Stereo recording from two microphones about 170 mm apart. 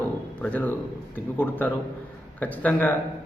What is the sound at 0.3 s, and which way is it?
Speech, 10° left (ahead or behind).